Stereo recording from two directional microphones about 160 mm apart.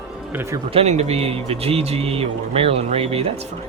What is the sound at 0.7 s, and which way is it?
A man's voice, 40° right (ahead or behind).